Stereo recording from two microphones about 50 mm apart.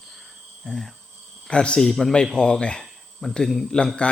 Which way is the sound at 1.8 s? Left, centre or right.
Centre.